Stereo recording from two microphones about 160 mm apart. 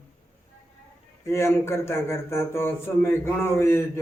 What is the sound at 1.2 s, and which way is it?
A man's voice, 15° left (ahead or behind).